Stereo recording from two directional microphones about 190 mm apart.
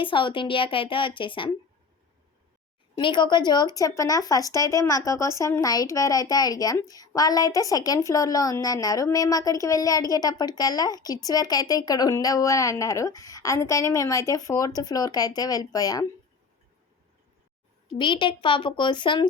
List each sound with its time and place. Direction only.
0.0 s speech: 25° left (ahead or behind)
3.0 s speech: 25° left (ahead or behind)
17.9 s speech: 25° left (ahead or behind)